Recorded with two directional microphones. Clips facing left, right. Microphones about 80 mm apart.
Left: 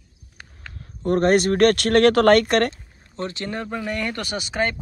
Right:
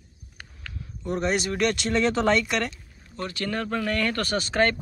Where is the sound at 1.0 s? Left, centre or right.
Left.